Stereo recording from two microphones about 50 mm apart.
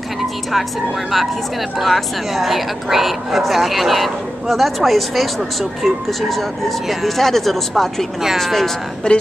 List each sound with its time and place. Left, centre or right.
0.2 s a sound: centre
1.8 s a woman's voice: centre
9.1 s speech: centre